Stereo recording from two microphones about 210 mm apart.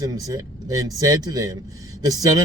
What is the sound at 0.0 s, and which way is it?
Speech, 15° right (ahead or behind).